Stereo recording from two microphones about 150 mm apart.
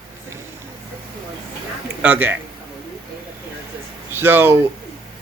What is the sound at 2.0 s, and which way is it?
Speech, 10° right (ahead or behind).